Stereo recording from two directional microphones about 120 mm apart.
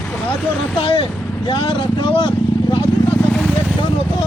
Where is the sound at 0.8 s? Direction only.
45° left (ahead or behind).